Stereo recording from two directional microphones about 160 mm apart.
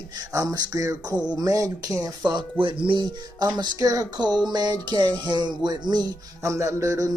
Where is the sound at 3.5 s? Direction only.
25° right (ahead or behind).